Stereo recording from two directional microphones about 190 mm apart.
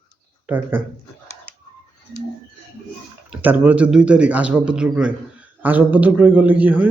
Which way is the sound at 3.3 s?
10° right (ahead or behind).